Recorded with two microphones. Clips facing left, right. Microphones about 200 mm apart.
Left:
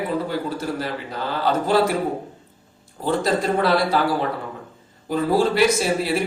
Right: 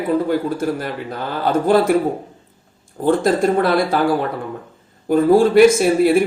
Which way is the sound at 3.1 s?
50° right (ahead or behind).